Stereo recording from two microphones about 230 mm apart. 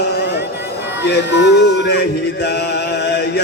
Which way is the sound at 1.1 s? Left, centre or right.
Left.